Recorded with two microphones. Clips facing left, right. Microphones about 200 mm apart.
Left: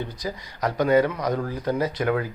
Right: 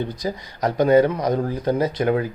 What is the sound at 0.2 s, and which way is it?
Speech, 20° right (ahead or behind).